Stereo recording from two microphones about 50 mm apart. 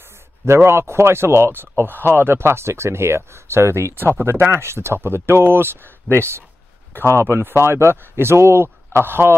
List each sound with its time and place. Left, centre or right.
0.5 s speech: right
4.2 s speech: right